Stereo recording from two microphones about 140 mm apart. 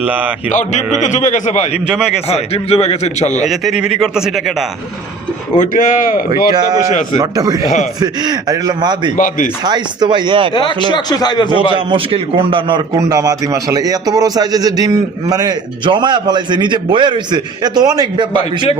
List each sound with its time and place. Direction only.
0.0 s speech: 10° right (ahead or behind)
0.5 s a man's voice: 60° left (ahead or behind)
1.9 s speech: 5° right (ahead or behind)
2.3 s a man's voice: 50° left (ahead or behind)
3.4 s speech: centre (ahead or behind)
5.5 s speech: 70° left (ahead or behind)
6.5 s speech: 30° right (ahead or behind)
7.6 s a man's voice: 55° left (ahead or behind)
8.0 s a man's voice: 30° right (ahead or behind)
9.1 s speech: 70° left (ahead or behind)
9.6 s a man's voice: 30° right (ahead or behind)
10.9 s speech: 30° left (ahead or behind)
11.5 s a man's voice: 35° right (ahead or behind)